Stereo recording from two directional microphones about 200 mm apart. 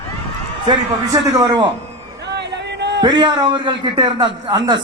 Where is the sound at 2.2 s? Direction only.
55° right (ahead or behind).